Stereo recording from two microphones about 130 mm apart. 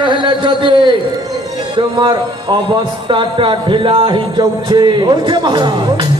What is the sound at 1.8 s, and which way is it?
Speech, 35° right (ahead or behind).